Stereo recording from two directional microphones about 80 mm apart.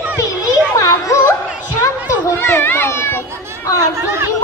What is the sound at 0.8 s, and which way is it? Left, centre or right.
Music, left.